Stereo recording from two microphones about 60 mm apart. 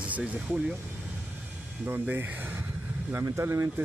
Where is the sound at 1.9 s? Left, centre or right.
Right.